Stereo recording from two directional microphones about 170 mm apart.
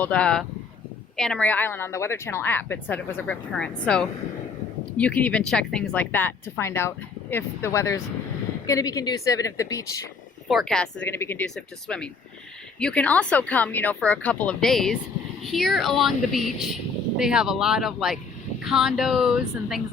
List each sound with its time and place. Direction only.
0.0 s a woman's voice: 5° left (ahead or behind)
10.5 s speech: centre (ahead or behind)
11.1 s speech: 15° left (ahead or behind); by 19.8 s centre (ahead or behind)